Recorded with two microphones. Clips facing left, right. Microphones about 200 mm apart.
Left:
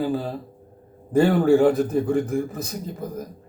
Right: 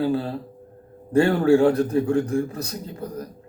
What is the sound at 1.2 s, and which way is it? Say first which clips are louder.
A man's voice: even; 5° left (ahead or behind).